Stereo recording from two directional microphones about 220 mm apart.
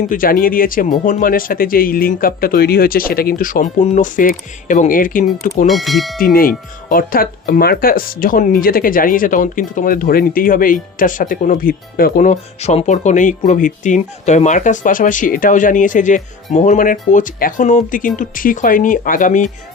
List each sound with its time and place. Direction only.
0.1 s speech: 40° left (ahead or behind)
5.6 s speech: centre (ahead or behind)
6.9 s speech: 40° left (ahead or behind)